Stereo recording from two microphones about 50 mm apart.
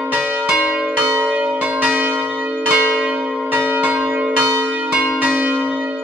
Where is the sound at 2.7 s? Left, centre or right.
Right.